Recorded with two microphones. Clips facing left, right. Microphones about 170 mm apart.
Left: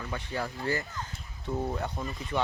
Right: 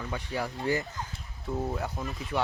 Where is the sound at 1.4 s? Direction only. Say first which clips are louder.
Even; centre (ahead or behind).